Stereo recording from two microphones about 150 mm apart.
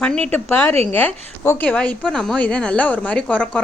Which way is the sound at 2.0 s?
Centre (ahead or behind).